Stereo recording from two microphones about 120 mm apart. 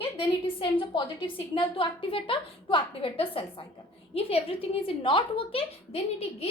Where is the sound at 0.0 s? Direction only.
45° left (ahead or behind).